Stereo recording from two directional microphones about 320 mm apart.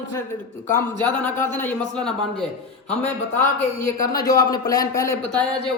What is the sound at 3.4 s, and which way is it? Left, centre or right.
A man's voice, centre.